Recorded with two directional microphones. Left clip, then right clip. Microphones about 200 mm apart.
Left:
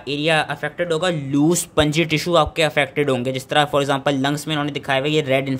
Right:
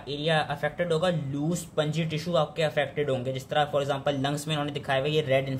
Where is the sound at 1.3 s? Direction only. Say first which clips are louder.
Left 12 dB; 40° left (ahead or behind).